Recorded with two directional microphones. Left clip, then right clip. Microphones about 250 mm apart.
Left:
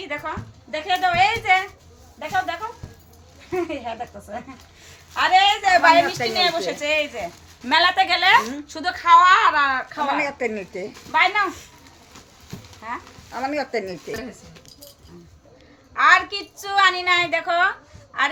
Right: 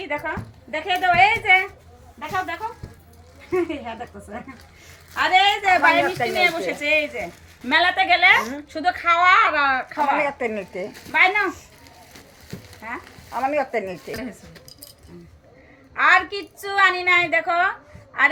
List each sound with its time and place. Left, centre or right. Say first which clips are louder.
0.7 s a woman's voice: right 1 dB; centre
12.8 s speech: left 1 dB; centre
16.0 s a woman's voice: left 1 dB; centre